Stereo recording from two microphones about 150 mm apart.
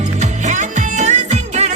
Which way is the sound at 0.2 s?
55° right (ahead or behind).